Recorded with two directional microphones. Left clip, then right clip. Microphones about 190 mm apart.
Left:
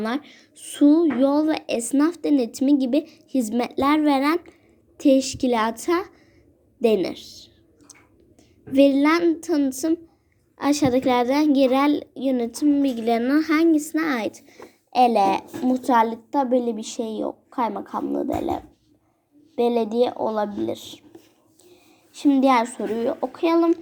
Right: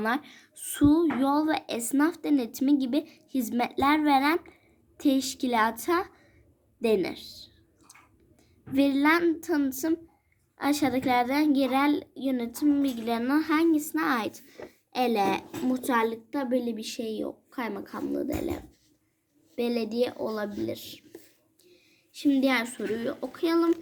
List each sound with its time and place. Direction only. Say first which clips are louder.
0.0 s a woman's voice: left 1 dB; centre (ahead or behind)
6.7 s a sound: left 6 dB; 10° left (ahead or behind)
8.7 s a woman's voice: left 6 dB; 10° left (ahead or behind); by 20.5 s 10° right (ahead or behind)
21.6 s a woman's voice: left 7 dB; 5° right (ahead or behind)